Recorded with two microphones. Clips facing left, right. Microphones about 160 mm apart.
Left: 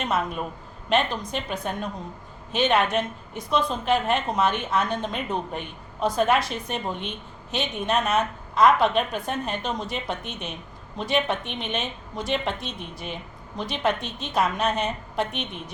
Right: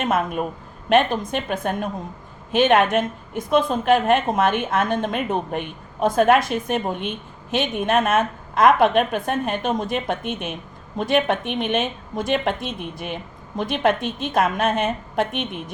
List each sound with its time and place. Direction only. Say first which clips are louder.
0.0 s a woman's voice: right 4 dB; 50° right (ahead or behind)